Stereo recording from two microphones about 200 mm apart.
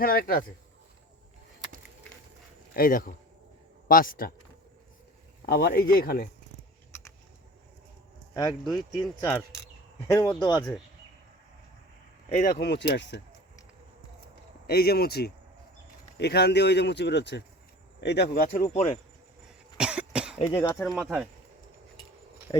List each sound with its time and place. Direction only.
0.0 s speech: 45° left (ahead or behind)
2.7 s speech: 45° left (ahead or behind)
5.5 s speech: 50° left (ahead or behind)
8.3 s speech: 15° left (ahead or behind)
10.1 s speech: 20° left (ahead or behind)
12.3 s speech: 40° left (ahead or behind); by 13.2 s 60° left (ahead or behind)
14.7 s speech: 50° left (ahead or behind); by 18.9 s 35° left (ahead or behind)
19.7 s cough: 5° right (ahead or behind)
20.5 s speech: 15° left (ahead or behind)
20.8 s speech: centre (ahead or behind)